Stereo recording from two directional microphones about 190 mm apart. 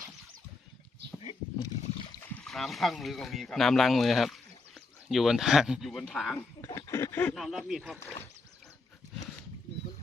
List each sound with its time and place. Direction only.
1.2 s a sound: 30° left (ahead or behind)
2.1 s speech: 10° left (ahead or behind)
6.6 s speech: 15° left (ahead or behind)
7.3 s speech: centre (ahead or behind)